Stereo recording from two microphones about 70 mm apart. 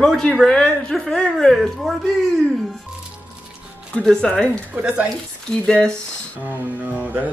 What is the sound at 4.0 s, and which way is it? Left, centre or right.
Speech, centre.